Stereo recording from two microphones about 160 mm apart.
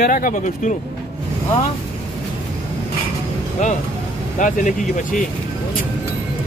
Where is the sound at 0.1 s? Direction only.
55° left (ahead or behind).